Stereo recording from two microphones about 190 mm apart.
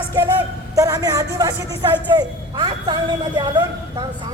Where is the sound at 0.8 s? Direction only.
20° right (ahead or behind).